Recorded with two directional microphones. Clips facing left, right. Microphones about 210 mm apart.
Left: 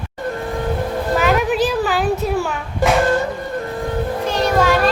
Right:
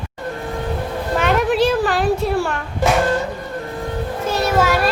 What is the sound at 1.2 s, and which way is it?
Speech, centre (ahead or behind).